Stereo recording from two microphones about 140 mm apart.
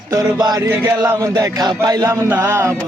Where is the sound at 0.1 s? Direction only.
25° right (ahead or behind).